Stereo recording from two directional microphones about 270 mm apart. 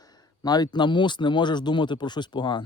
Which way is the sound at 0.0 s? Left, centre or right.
Centre.